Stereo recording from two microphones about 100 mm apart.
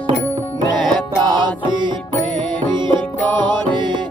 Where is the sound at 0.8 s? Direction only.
50° right (ahead or behind).